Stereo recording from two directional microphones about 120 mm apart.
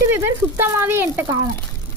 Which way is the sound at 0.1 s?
20° right (ahead or behind).